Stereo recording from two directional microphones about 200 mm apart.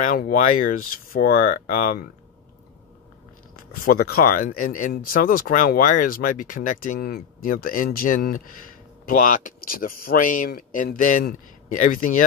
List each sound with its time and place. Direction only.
0.0 s speech: 45° left (ahead or behind)
3.8 s speech: 50° left (ahead or behind)